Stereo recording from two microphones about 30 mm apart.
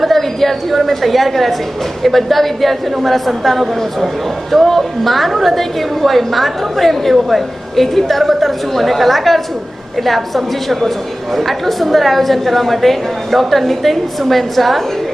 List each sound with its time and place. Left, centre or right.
0.0 s a woman's voice: centre